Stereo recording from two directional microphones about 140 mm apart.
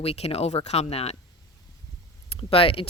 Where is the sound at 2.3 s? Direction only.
40° left (ahead or behind).